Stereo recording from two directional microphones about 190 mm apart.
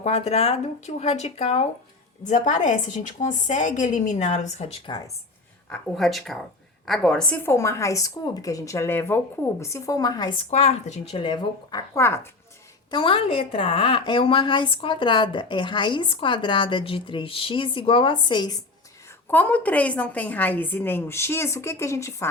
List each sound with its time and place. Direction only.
0.0 s a woman's voice: 35° left (ahead or behind)
5.6 s a woman's voice: 5° left (ahead or behind)
12.9 s a woman's voice: 25° left (ahead or behind)
19.3 s a woman's voice: 10° left (ahead or behind)